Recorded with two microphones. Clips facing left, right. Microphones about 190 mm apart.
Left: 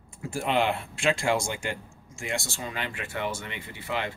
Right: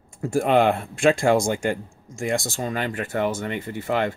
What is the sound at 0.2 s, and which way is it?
Speech, 45° right (ahead or behind).